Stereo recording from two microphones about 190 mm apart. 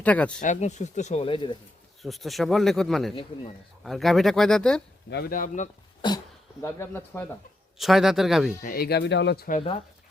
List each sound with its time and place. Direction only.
0.0 s speech: 5° left (ahead or behind)
0.4 s speech: 40° left (ahead or behind)
2.0 s speech: centre (ahead or behind)
5.1 s speech: 50° left (ahead or behind)
6.0 s speech: 25° left (ahead or behind)
6.6 s speech: 10° left (ahead or behind)
7.8 s speech: centre (ahead or behind)
8.6 s speech: 50° left (ahead or behind)
9.6 s speech: 30° left (ahead or behind)